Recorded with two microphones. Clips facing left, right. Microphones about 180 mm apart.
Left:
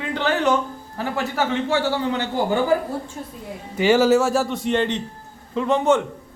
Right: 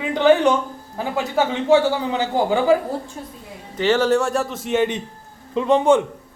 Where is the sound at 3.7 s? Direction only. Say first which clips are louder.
Left 2 dB; 10° left (ahead or behind); by 5.0 s 10° right (ahead or behind).